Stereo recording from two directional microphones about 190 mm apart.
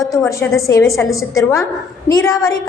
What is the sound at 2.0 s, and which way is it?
Speech, 15° left (ahead or behind).